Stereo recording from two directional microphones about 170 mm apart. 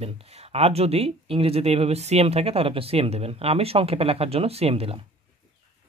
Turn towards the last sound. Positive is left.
turn(degrees=-35)  # may be behind; listen again after turning